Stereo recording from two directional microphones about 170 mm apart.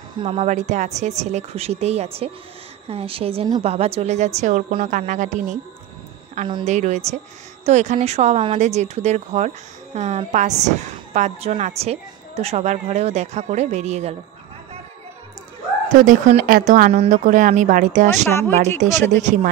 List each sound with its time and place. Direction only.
0.2 s speech: 30° right (ahead or behind)
0.5 s speech: 45° right (ahead or behind)
6.6 s speech: 45° right (ahead or behind)
15.9 s speech: 50° right (ahead or behind)
16.9 s speech: 40° right (ahead or behind)
18.3 s speech: 15° left (ahead or behind)
19.2 s speech: 50° right (ahead or behind)